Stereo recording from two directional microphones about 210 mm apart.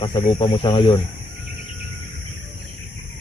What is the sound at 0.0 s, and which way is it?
Speech, 25° left (ahead or behind).